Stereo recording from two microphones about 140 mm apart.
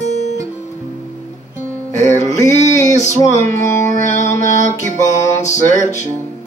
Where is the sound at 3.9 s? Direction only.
55° left (ahead or behind).